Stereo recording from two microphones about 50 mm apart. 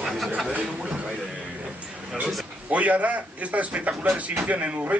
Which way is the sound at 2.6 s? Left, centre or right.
Right.